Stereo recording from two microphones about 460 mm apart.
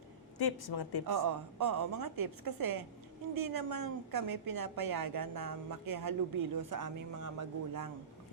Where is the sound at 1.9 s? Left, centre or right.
Right.